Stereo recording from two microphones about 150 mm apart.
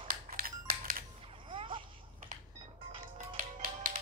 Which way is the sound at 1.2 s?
35° right (ahead or behind).